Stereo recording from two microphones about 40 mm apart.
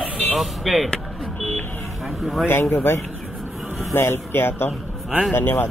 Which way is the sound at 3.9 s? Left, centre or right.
Left.